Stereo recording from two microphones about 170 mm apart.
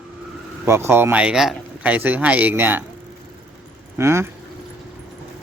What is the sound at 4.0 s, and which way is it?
Speech, 15° right (ahead or behind).